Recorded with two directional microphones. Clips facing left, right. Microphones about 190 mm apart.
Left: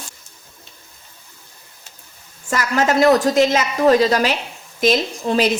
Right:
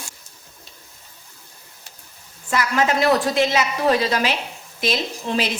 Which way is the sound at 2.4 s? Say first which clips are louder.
Left 2 dB; 45° left (ahead or behind).